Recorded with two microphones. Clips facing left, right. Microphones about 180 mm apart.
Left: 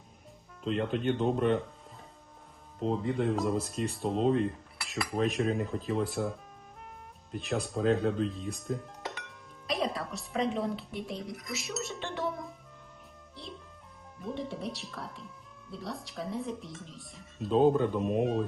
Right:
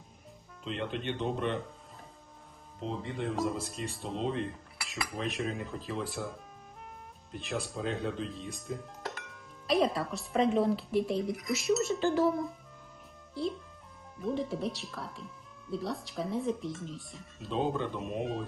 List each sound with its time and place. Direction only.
1.0 s speech: 45° left (ahead or behind)
2.8 s speech: centre (ahead or behind)
4.4 s cutlery: centre (ahead or behind)
5.6 s speech: centre (ahead or behind)
17.5 s speech: 45° left (ahead or behind)
18.0 s speech: centre (ahead or behind)